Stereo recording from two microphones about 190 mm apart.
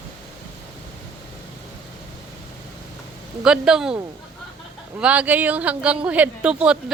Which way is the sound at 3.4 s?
5° right (ahead or behind).